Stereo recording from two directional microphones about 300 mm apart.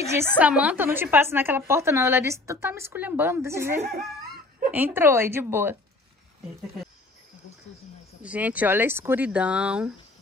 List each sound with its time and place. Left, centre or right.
0.1 s a woman's voice: centre
8.2 s speech: centre